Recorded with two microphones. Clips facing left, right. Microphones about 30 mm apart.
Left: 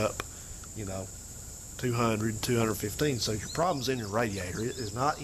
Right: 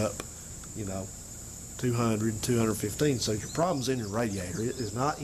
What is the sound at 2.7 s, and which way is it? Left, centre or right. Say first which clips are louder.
Speech: right 2 dB; centre.